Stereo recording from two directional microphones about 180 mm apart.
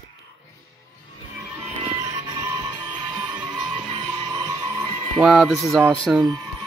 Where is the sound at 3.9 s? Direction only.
25° right (ahead or behind).